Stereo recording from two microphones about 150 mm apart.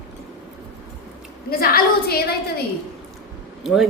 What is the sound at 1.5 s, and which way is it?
Speech, 85° left.